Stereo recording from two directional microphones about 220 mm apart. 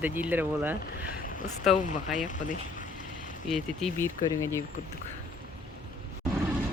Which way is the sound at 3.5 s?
Centre (ahead or behind).